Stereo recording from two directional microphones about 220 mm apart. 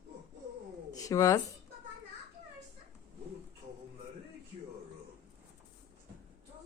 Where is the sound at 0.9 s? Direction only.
15° left (ahead or behind).